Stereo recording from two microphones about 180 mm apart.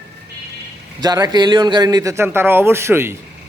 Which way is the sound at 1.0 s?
20° right (ahead or behind).